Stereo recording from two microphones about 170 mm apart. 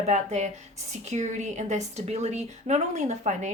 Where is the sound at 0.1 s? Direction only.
40° right (ahead or behind).